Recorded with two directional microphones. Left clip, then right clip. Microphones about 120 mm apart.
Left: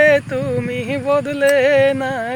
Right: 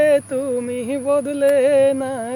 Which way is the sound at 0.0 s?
25° right (ahead or behind).